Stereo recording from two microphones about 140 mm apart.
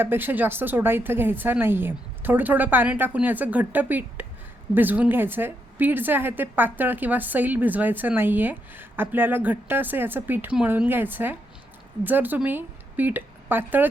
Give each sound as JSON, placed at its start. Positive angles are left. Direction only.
{"t": 0.0, "sound": "a woman's voice", "side_deg": -15}